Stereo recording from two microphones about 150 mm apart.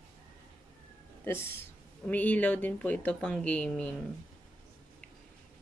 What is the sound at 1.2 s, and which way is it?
Speech, 15° left (ahead or behind).